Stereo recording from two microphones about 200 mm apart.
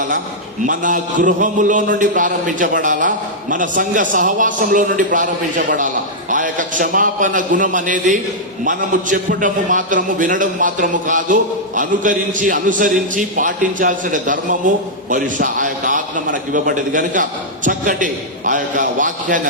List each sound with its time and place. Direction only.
0.6 s a man's voice: 40° right (ahead or behind)